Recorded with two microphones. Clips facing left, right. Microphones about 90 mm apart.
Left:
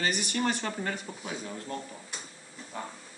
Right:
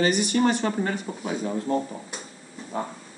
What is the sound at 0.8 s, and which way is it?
Speech, 25° right (ahead or behind).